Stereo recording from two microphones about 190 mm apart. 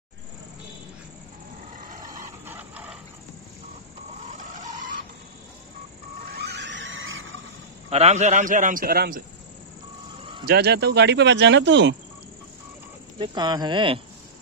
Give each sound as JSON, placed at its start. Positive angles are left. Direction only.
{"t": 2.0, "sound": "a sound", "side_deg": -10}
{"t": 4.4, "sound": "vehicle", "side_deg": -40}
{"t": 6.2, "sound": "a sound", "side_deg": -60}
{"t": 7.9, "sound": "a man's voice", "side_deg": -35}
{"t": 10.4, "sound": "speech", "side_deg": -55}
{"t": 13.2, "sound": "speech", "side_deg": -25}